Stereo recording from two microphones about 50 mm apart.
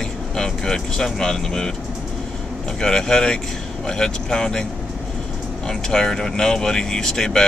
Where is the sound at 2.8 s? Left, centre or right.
Centre.